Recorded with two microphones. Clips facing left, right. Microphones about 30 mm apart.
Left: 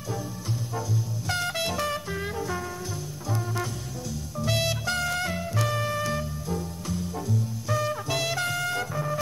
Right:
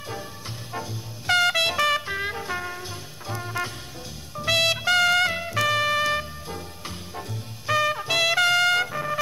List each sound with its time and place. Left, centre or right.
1.2 s music: right
1.8 s music: right
2.0 s music: right
4.5 s music: right
4.9 s music: right
6.5 s music: right
7.6 s music: right
7.9 s music: right
8.4 s trumpet: right